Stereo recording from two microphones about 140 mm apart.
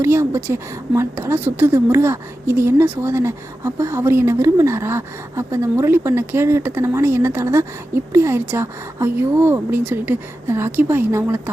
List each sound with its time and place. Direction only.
0.0 s a woman's voice: 20° right (ahead or behind)